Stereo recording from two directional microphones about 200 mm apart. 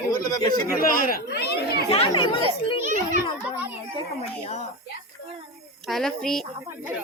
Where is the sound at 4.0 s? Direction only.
30° left (ahead or behind).